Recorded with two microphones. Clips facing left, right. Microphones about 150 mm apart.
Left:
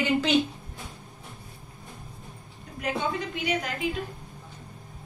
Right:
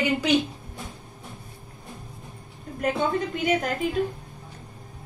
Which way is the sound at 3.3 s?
45° right (ahead or behind).